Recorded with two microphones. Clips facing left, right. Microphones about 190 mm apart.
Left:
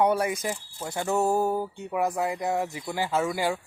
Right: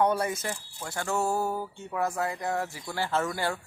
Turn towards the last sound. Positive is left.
turn(degrees=15)  # may be behind; listen again after turning